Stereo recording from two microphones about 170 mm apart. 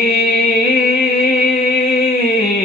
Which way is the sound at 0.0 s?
65° left (ahead or behind).